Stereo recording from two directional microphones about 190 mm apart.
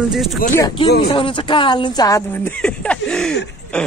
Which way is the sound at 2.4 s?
5° left (ahead or behind).